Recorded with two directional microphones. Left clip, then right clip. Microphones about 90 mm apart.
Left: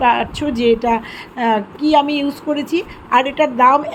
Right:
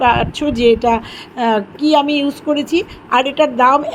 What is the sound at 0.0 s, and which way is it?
A woman's voice, 30° right (ahead or behind).